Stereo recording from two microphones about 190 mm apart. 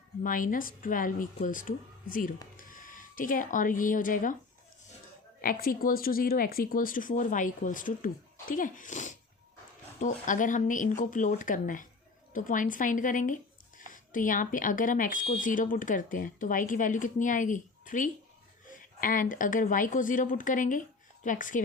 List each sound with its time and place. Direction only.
0.2 s speech: 45° left (ahead or behind)
5.4 s speech: 50° left (ahead or behind)